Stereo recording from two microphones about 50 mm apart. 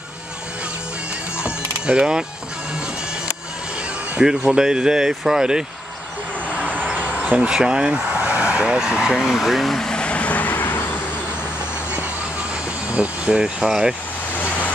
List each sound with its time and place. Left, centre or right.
1.4 s mechanisms: centre
4.5 s speech: centre
6.6 s vehicle: right
7.2 s speech: right
8.1 s vehicle: right
8.6 s speech: centre
9.8 s vehicle: centre; by 11.0 s left
12.9 s speech: right